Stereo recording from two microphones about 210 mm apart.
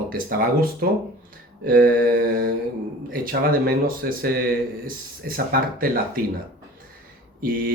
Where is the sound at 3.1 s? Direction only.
45° right (ahead or behind).